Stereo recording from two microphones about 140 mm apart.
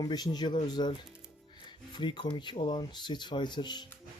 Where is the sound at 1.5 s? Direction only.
35° left (ahead or behind).